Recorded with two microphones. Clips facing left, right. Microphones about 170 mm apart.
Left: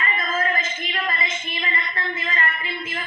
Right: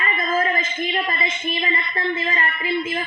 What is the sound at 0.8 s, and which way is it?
A woman's voice, 25° right (ahead or behind).